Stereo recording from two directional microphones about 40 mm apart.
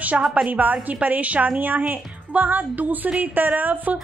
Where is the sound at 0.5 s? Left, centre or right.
Right.